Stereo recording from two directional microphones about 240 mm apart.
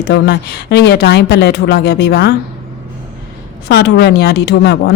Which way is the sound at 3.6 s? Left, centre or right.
Left.